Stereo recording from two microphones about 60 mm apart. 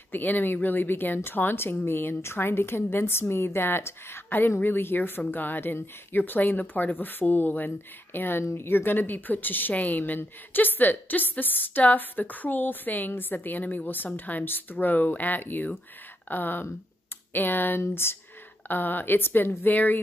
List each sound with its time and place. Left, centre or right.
0.1 s speech: left